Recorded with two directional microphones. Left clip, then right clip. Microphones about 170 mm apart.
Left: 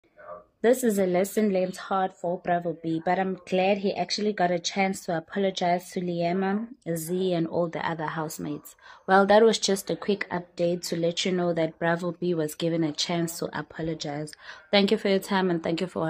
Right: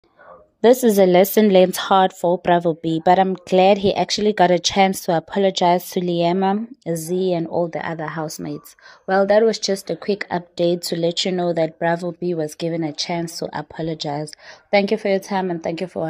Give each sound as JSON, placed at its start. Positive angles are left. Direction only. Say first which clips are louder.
{"t": 0.6, "sound": "a woman's voice", "louder": "right 9 dB", "side_deg": -35}
{"t": 8.5, "sound": "speech", "louder": "right 5 dB", "side_deg": -10}
{"t": 14.7, "sound": "speech", "louder": "right 5 dB", "side_deg": -10}